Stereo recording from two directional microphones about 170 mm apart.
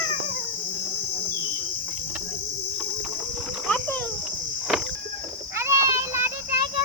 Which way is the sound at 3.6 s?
10° left (ahead or behind).